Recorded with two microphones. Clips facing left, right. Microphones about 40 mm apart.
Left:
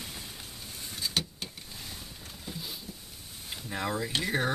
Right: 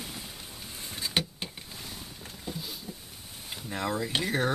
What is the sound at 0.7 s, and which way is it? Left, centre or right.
Vehicle, centre.